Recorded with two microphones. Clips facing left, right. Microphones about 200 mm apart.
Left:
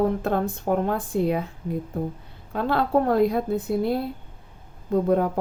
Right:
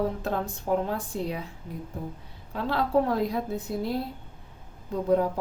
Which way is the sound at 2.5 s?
60° left (ahead or behind).